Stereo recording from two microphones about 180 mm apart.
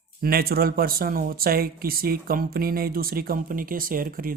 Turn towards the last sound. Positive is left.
turn(degrees=-50)  # may be behind; listen again after turning